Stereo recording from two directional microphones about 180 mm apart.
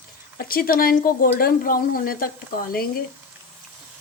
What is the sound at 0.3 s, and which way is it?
Speech, 55° left (ahead or behind).